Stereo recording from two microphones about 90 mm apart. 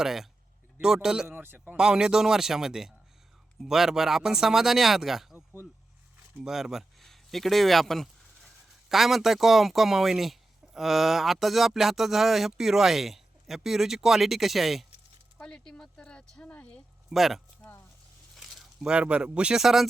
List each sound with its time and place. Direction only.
0.0 s speech: 5° right (ahead or behind)
1.4 s speech: 20° right (ahead or behind)
1.7 s speech: 10° right (ahead or behind)
6.4 s speech: 5° right (ahead or behind); by 16.8 s 15° left (ahead or behind)
17.1 s speech: centre (ahead or behind)
17.6 s a sound: 20° left (ahead or behind)
18.3 s speech: centre (ahead or behind)